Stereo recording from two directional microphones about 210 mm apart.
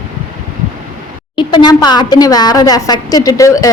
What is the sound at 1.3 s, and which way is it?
A woman's voice, 20° left (ahead or behind).